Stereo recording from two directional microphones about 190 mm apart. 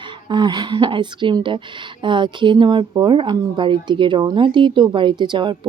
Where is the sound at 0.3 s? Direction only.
25° right (ahead or behind).